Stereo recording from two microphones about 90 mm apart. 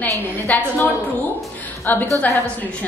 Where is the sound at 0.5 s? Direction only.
20° left (ahead or behind).